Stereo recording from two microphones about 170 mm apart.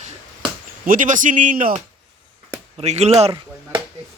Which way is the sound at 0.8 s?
50° right (ahead or behind).